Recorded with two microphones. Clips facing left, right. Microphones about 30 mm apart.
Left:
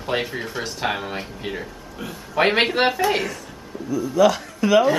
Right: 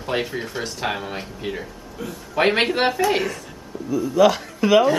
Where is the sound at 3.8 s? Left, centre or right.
Centre.